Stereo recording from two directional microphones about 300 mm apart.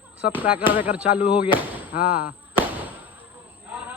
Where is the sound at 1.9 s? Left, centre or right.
Left.